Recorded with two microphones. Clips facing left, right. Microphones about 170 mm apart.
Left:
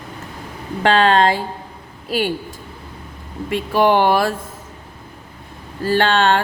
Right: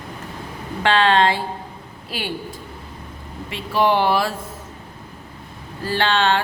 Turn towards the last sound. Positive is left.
turn(degrees=45)  # may be behind; listen again after turning